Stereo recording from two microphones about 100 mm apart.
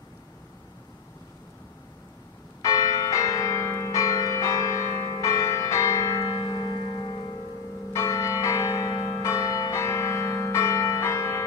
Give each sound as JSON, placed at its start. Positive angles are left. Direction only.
{"t": 2.6, "sound": "change ringing", "side_deg": 35}
{"t": 6.2, "sound": "music", "side_deg": 50}
{"t": 7.9, "sound": "change ringing", "side_deg": 30}